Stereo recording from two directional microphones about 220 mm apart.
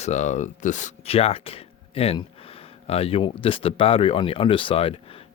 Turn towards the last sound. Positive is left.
turn(degrees=25)  # may be behind; listen again after turning